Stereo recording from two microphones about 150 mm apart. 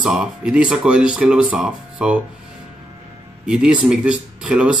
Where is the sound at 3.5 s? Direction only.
5° right (ahead or behind).